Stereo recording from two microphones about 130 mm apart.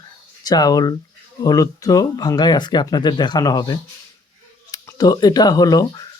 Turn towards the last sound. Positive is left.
turn(degrees=30)  # may be behind; listen again after turning